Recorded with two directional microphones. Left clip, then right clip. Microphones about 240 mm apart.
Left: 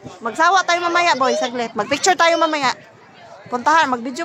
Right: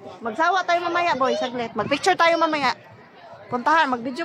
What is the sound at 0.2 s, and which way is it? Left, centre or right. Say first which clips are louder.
A man's voice: left 6 dB; centre.